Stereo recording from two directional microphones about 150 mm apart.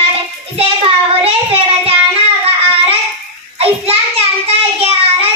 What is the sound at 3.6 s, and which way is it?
Child singing, 40° right (ahead or behind).